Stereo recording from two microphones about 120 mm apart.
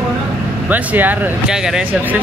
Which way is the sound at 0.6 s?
15° right (ahead or behind).